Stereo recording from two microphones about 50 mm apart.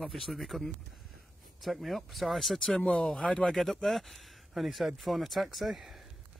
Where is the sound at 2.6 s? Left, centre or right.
Centre.